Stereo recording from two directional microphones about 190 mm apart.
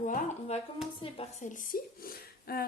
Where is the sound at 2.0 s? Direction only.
50° left (ahead or behind).